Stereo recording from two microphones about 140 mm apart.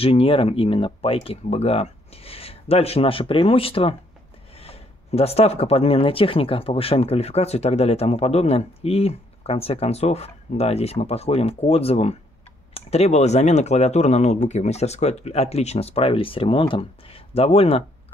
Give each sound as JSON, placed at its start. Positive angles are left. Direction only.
{"t": 0.0, "sound": "speech", "side_deg": 45}